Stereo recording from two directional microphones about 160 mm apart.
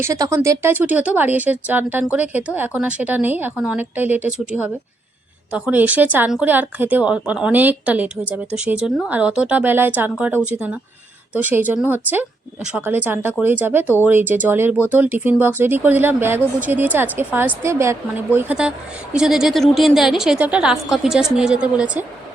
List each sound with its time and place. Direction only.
0.0 s a woman's voice: 20° right (ahead or behind)